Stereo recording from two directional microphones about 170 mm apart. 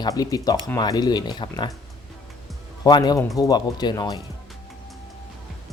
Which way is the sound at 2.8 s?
25° left (ahead or behind).